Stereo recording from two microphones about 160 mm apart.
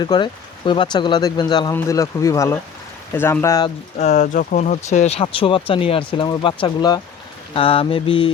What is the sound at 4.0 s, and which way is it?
Speech, 50° left (ahead or behind).